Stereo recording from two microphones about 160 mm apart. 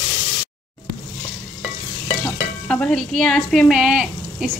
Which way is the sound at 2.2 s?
10° left (ahead or behind).